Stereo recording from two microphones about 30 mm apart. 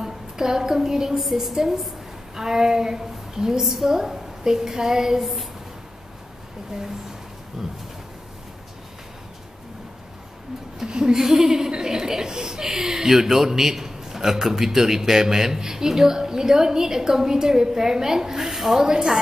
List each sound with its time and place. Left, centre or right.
0.0 s a woman's voice: centre
2.3 s a sound: centre
3.6 s speech: centre
5.2 s a woman's voice: centre
7.6 s speech: centre
10.9 s a sound: right
11.1 s speech: centre